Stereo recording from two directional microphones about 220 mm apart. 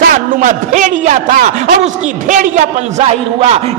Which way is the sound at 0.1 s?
35° right (ahead or behind).